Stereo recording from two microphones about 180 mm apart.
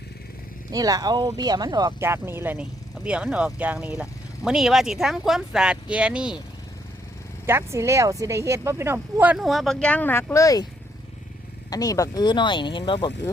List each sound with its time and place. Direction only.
0.7 s speech: 20° right (ahead or behind)
7.4 s speech: 15° right (ahead or behind); by 10.7 s 20° left (ahead or behind)
11.7 s speech: 20° left (ahead or behind)